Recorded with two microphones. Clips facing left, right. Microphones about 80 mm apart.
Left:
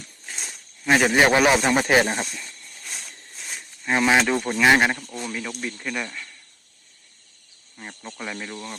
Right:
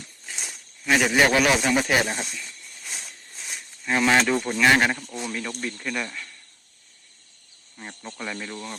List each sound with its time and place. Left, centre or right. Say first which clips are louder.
0.3 s snake: even; centre
0.9 s speech: left 2 dB; centre
1.6 s speech: left 3 dB; left
2.3 s a sound: even; centre
3.9 s speech: left 1 dB; centre
7.8 s speech: even; centre